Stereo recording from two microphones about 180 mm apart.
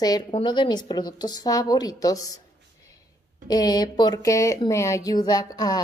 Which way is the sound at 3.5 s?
20° left (ahead or behind).